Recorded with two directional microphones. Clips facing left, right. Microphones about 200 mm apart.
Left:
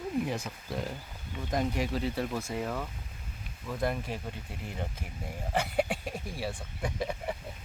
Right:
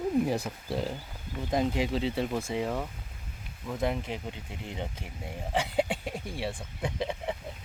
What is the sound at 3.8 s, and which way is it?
Speech, 20° right (ahead or behind).